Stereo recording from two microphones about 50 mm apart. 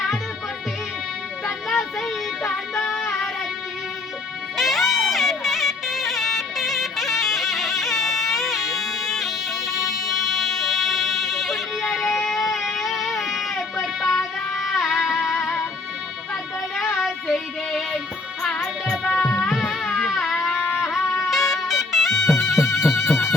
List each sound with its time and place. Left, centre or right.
1.7 s music: centre
4.5 s music: centre
17.0 s music: centre
20.1 s a sound: centre
20.8 s music: centre